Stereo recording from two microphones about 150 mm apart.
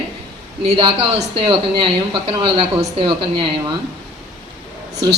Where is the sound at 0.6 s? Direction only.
35° right (ahead or behind).